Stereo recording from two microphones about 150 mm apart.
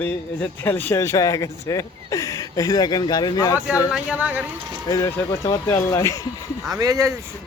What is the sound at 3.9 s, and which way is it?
Speech, 10° right (ahead or behind).